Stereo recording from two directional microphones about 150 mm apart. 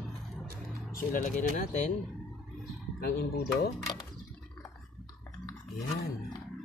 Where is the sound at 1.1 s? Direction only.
60° left (ahead or behind).